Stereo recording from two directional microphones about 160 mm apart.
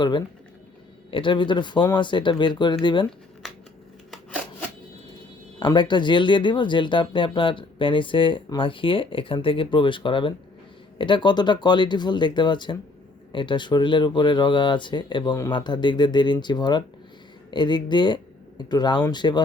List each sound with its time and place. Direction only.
1.1 s speech: 30° left (ahead or behind)
5.5 s speech: 30° left (ahead or behind)